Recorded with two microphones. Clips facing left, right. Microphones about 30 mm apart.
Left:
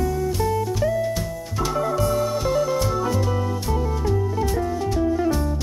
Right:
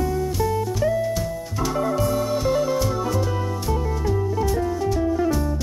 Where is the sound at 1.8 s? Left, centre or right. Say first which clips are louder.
Even; centre.